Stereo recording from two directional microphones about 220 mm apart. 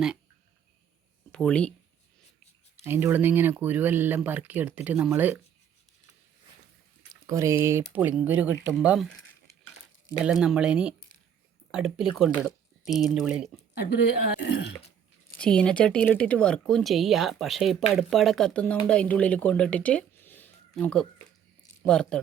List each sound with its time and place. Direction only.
1.3 s speech: 5° left (ahead or behind)
2.8 s speech: 10° right (ahead or behind)
7.1 s speech: 15° right (ahead or behind)
10.2 s speech: 5° right (ahead or behind)
13.9 s speech: 50° left (ahead or behind)
14.8 s a sound: 30° left (ahead or behind)
15.4 s speech: 5° left (ahead or behind)